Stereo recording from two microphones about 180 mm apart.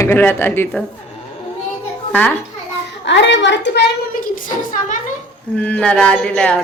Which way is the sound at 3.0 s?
80° left.